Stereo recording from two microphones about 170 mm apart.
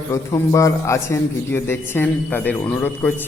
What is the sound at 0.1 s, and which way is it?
A man's voice, 15° left (ahead or behind).